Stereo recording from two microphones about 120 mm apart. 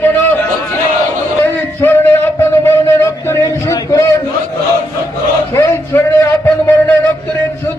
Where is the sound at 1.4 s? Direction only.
20° left (ahead or behind).